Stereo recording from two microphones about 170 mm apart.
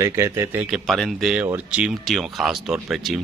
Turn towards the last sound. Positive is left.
turn(degrees=-5)  # may be behind; listen again after turning